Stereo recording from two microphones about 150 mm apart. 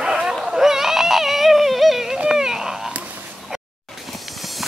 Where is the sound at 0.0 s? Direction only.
5° right (ahead or behind).